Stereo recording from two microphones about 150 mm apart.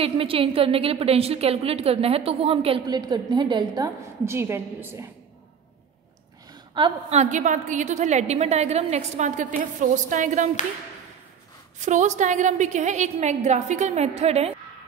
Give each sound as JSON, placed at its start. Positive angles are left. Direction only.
{"t": 0.0, "sound": "a woman's voice", "side_deg": -40}
{"t": 4.3, "sound": "a woman's voice", "side_deg": -15}
{"t": 6.8, "sound": "a woman's voice", "side_deg": -35}
{"t": 7.1, "sound": "a woman's voice", "side_deg": -50}
{"t": 11.8, "sound": "a woman's voice", "side_deg": -50}